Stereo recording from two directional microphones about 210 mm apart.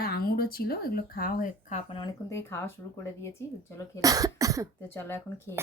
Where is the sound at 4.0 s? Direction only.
15° right (ahead or behind).